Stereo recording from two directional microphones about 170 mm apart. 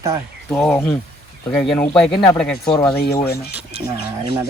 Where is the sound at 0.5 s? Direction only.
10° left (ahead or behind).